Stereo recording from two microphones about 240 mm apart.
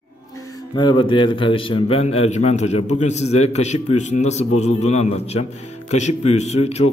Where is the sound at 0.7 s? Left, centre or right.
Centre.